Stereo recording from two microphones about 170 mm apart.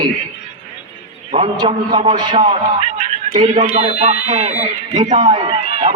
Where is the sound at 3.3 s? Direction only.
45° right (ahead or behind).